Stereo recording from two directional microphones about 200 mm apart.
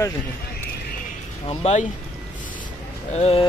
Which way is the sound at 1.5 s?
35° left (ahead or behind).